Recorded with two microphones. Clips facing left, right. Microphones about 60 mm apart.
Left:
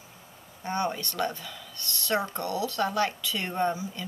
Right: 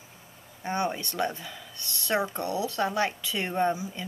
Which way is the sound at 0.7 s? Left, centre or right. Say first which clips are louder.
Even; right.